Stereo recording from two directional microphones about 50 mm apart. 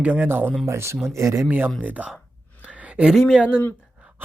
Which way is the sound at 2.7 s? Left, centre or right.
Right.